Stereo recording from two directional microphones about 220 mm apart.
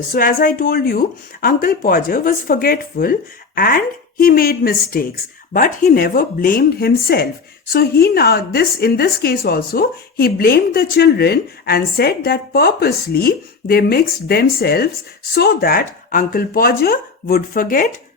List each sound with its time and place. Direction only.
0.1 s a woman's voice: 40° left (ahead or behind)